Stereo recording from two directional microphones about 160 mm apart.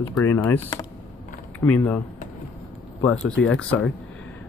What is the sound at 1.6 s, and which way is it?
Speech, 10° left (ahead or behind).